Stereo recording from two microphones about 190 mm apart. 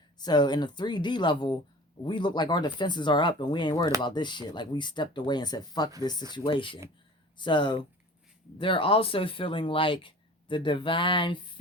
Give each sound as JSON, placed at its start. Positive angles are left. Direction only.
{"t": 0.2, "sound": "speech", "side_deg": 20}